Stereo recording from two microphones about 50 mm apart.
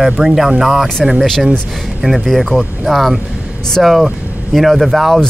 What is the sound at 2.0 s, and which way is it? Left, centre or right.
Speech, centre.